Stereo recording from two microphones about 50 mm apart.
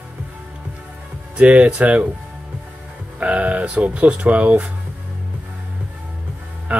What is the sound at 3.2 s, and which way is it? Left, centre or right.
Speech, right.